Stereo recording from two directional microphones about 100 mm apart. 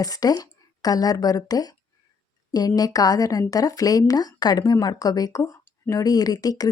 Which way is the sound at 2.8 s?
40° left (ahead or behind).